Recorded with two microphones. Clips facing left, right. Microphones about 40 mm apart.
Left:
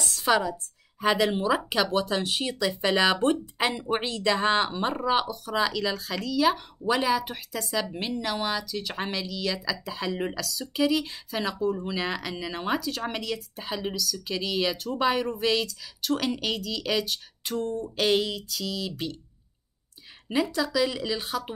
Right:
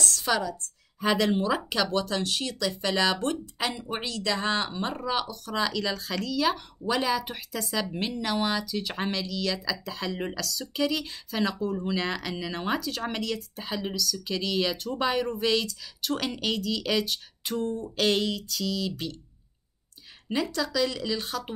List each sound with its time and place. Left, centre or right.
0.0 s a woman's voice: centre
20.4 s speech: centre